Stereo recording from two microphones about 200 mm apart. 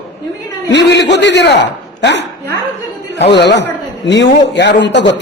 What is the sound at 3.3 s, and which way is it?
A man's voice, 60° left (ahead or behind).